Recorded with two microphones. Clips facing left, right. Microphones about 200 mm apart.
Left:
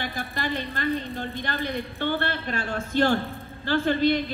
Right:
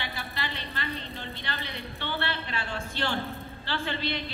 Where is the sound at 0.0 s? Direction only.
45° left (ahead or behind).